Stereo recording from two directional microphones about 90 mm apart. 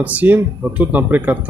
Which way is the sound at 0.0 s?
15° right (ahead or behind).